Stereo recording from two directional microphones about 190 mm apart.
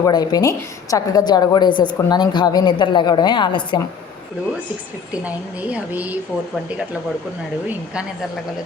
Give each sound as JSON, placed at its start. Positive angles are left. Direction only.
{"t": 0.0, "sound": "a woman's voice", "side_deg": 20}
{"t": 5.1, "sound": "a woman's voice", "side_deg": -10}